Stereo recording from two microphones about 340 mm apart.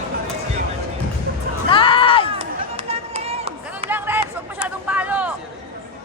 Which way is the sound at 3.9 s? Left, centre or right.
Centre.